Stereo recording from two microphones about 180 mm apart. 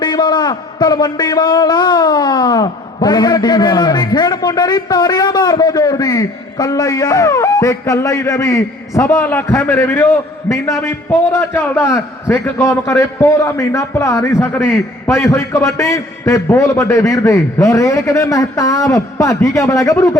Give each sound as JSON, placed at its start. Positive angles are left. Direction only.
{"t": 0.0, "sound": "a man's voice", "side_deg": 25}